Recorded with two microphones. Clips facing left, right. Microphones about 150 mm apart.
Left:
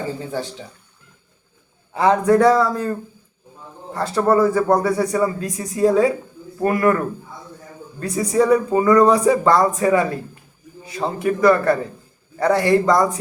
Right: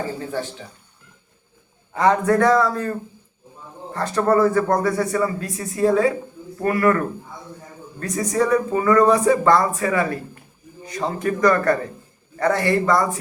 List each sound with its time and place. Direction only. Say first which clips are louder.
1.9 s speech: left 2 dB; 15° left (ahead or behind)
3.9 s speech: left 1 dB; 10° left (ahead or behind)
7.9 s speech: left 3 dB; 10° left (ahead or behind)
10.8 s speech: left 2 dB; 10° left (ahead or behind)